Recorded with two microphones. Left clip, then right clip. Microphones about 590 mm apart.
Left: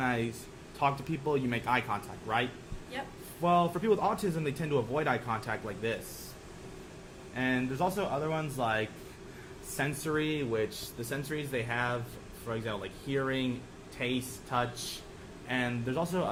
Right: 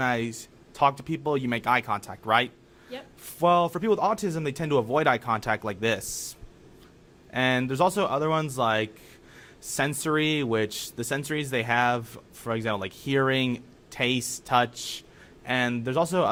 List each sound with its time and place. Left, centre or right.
0.0 s a man's voice: right
7.3 s a man's voice: right